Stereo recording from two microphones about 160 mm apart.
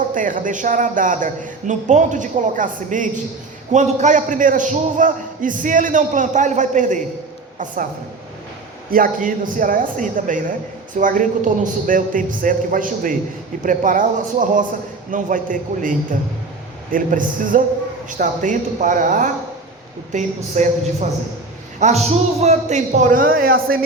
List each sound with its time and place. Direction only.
0.1 s a man's voice: 55° right (ahead or behind)
8.9 s a man's voice: 60° right (ahead or behind)